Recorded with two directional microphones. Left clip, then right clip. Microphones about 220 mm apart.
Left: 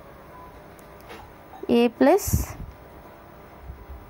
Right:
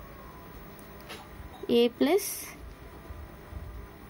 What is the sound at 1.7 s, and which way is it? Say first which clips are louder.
Speech: left 6 dB; 20° left (ahead or behind).